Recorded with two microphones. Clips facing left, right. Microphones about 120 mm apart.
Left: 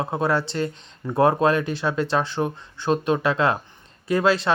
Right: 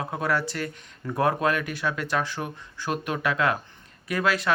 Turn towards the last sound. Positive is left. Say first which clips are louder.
# left 5 dB
turn(degrees=30)  # may be behind; listen again after turning